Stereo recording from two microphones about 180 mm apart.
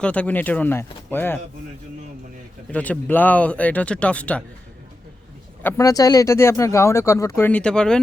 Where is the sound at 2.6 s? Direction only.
10° left (ahead or behind).